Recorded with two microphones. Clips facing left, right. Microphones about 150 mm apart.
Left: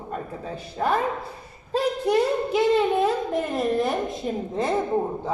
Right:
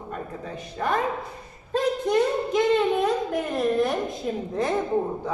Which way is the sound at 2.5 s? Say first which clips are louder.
Left 1 dB; 5° left (ahead or behind).